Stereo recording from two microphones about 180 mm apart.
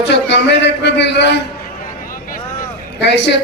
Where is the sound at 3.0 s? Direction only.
70° left (ahead or behind).